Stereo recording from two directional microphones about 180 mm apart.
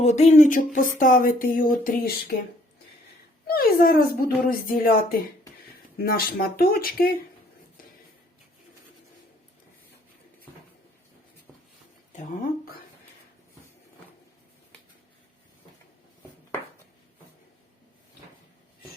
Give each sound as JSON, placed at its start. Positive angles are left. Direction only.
{"t": 0.0, "sound": "a sound", "side_deg": 40}
{"t": 3.4, "sound": "speech", "side_deg": 55}
{"t": 6.0, "sound": "speech", "side_deg": 60}
{"t": 12.1, "sound": "speech", "side_deg": 45}